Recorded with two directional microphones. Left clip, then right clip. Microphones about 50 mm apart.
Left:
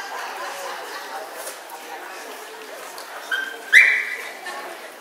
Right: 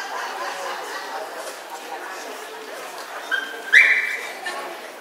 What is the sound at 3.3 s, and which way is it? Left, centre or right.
Dog, left.